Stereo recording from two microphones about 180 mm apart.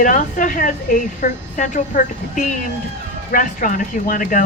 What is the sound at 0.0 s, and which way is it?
Speech, 45° left (ahead or behind).